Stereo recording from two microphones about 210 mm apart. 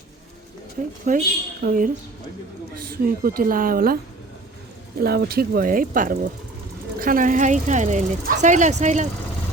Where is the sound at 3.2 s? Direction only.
45° right (ahead or behind).